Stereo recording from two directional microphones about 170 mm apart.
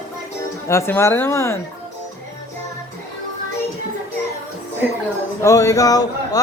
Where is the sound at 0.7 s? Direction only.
15° left (ahead or behind).